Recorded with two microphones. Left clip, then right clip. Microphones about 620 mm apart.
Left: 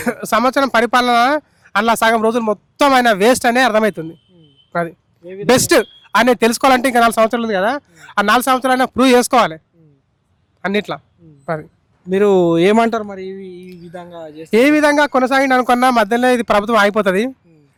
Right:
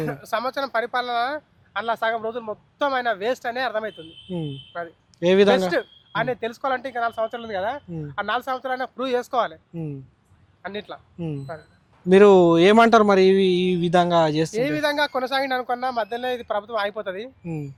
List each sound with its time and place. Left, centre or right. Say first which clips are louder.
0.0 s speech: left 10 dB; left
5.2 s speech: right 13 dB; right
5.5 s speech: left 9 dB; left
10.6 s a man's voice: left 13 dB; left
12.0 s speech: even; centre
13.1 s speech: right 13 dB; right
14.5 s speech: left 11 dB; left